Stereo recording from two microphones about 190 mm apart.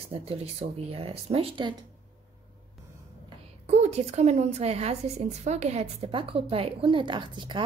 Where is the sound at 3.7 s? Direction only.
35° right (ahead or behind).